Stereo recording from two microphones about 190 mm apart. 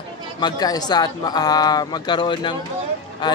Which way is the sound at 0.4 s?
20° left (ahead or behind).